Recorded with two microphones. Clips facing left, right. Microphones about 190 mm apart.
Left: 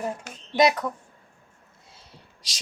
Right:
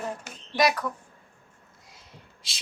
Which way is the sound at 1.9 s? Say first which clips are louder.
Even; 40° left (ahead or behind).